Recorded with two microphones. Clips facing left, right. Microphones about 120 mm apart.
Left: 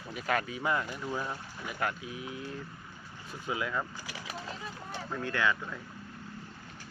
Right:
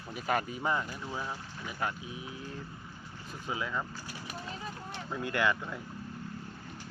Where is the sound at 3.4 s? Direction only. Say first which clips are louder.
Left 2 dB; centre (ahead or behind).